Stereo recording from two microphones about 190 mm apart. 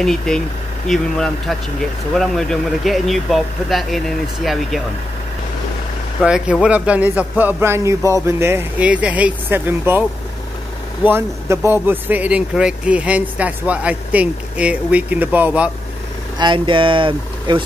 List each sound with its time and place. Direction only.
0.0 s speech: centre (ahead or behind)
6.2 s speech: 5° right (ahead or behind)
11.1 s speech: 15° right (ahead or behind)
16.3 s speech: 25° right (ahead or behind)